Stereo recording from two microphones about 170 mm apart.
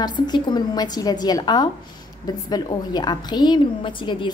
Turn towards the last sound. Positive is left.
turn(degrees=30)  # may be behind; listen again after turning